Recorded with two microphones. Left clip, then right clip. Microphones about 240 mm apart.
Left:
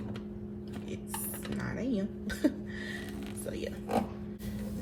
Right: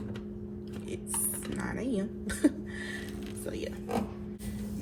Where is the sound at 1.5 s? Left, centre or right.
Right.